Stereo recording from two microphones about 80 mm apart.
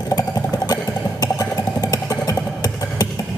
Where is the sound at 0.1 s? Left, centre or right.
Left.